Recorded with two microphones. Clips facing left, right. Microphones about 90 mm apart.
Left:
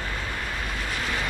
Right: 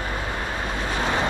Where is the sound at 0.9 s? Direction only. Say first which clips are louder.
Right 7 dB; 25° right (ahead or behind).